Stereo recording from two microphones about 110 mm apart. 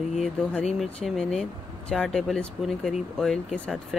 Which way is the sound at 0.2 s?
10° left (ahead or behind).